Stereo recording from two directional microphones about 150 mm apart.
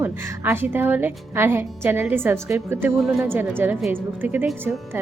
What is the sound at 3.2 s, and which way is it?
A woman's voice, 15° right (ahead or behind).